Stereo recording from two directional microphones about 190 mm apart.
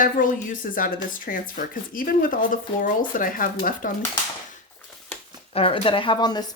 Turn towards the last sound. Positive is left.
turn(degrees=20)  # may be behind; listen again after turning